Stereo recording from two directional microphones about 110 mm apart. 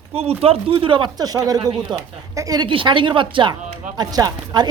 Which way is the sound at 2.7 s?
50° right (ahead or behind).